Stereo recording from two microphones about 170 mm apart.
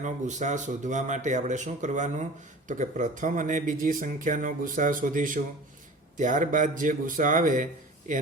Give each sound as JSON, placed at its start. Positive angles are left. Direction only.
{"t": 0.0, "sound": "speech", "side_deg": -45}